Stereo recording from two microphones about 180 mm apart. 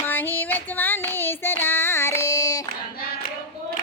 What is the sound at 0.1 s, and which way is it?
Child singing, 10° left (ahead or behind).